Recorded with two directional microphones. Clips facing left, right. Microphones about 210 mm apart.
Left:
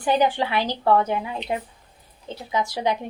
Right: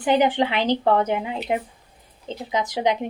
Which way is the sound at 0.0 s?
20° right (ahead or behind).